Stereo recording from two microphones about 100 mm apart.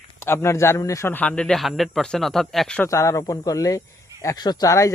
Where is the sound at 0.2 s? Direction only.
25° left (ahead or behind).